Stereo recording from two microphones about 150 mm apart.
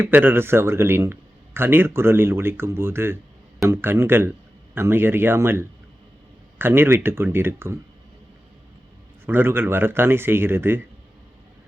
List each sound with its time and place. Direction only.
0.0 s a man's voice: 10° right (ahead or behind)
9.2 s a man's voice: 15° right (ahead or behind)